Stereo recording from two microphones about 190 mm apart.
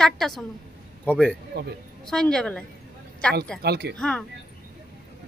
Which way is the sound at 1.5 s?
60° right (ahead or behind).